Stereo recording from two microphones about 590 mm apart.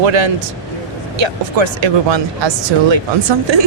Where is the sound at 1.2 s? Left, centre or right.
Right.